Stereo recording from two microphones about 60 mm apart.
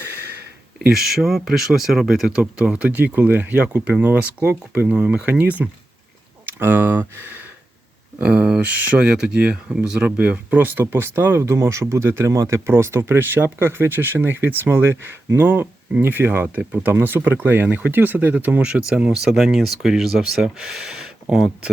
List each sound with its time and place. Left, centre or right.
0.8 s speech: centre
2.4 s speech: centre
4.9 s speech: centre; by 7.4 s right
8.2 s speech: centre; by 12.3 s right
12.3 s speech: right
18.7 s speech: centre